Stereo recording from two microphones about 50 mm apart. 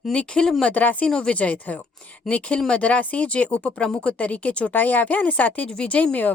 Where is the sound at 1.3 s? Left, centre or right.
Left.